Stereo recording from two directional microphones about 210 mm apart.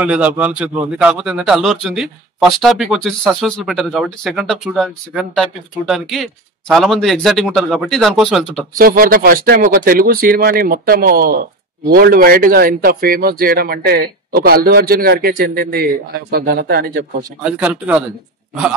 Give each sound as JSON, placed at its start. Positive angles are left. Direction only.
{"t": 0.0, "sound": "a man's voice", "side_deg": -5}
{"t": 8.7, "sound": "speech", "side_deg": -45}
{"t": 17.4, "sound": "speech", "side_deg": -5}